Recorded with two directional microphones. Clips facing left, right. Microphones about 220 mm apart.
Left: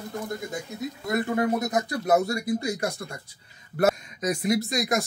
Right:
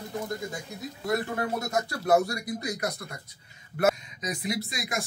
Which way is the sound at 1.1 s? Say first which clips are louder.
Left 6 dB; 20° left (ahead or behind).